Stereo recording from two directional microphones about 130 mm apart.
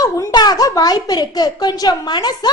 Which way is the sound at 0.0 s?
25° left (ahead or behind).